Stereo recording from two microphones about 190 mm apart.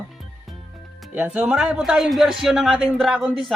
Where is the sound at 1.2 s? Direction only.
10° right (ahead or behind).